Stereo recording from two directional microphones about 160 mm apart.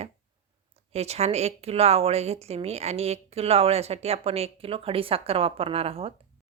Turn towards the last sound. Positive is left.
turn(degrees=-35)  # may be behind; listen again after turning